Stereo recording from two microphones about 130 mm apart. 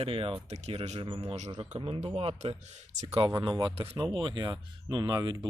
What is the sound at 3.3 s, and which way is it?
Speech, 35° right (ahead or behind).